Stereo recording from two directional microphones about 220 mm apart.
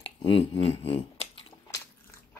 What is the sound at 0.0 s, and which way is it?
Speech, 25° left (ahead or behind).